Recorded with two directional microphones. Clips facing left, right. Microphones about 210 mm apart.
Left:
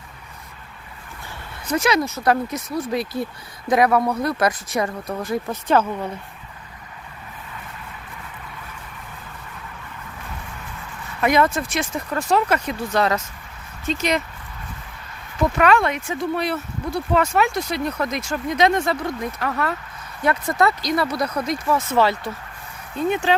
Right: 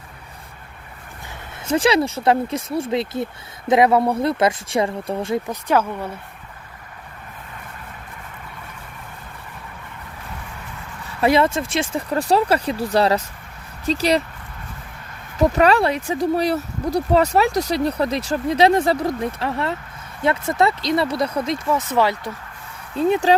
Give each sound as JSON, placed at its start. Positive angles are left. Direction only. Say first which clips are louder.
{"t": 1.6, "sound": "speech", "louder": "right 3 dB", "side_deg": -30}
{"t": 5.5, "sound": "speech", "louder": "even", "side_deg": -10}
{"t": 11.2, "sound": "speech", "louder": "right 2 dB", "side_deg": -30}
{"t": 15.4, "sound": "speech", "louder": "right 2 dB", "side_deg": -35}
{"t": 23.0, "sound": "speech", "louder": "right 4 dB", "side_deg": -30}